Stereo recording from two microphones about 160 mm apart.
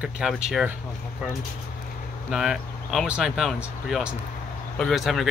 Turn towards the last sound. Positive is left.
turn(degrees=0)  # may be behind; listen again after turning